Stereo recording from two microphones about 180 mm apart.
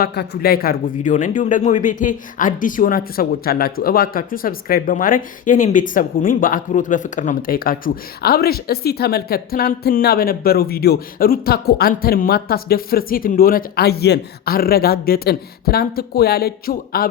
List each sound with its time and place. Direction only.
0.0 s a man's voice: 60° left (ahead or behind)